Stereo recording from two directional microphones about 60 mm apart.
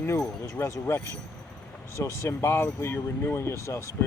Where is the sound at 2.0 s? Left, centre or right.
Left.